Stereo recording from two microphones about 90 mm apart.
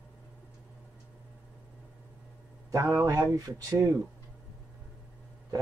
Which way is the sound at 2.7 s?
35° right (ahead or behind).